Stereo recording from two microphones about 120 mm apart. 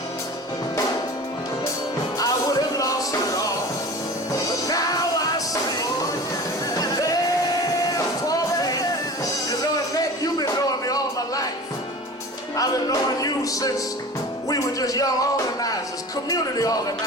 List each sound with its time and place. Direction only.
2.1 s music: 30° left (ahead or behind)
6.7 s music: 30° left (ahead or behind)
12.5 s music: 30° left (ahead or behind)
16.3 s speech: 30° left (ahead or behind)